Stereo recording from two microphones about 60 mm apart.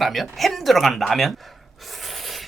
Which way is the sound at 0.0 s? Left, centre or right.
Centre.